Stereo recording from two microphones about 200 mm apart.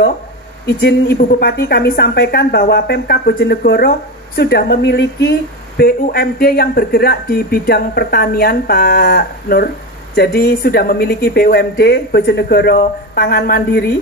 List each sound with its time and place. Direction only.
0.7 s a woman's voice: 55° left (ahead or behind)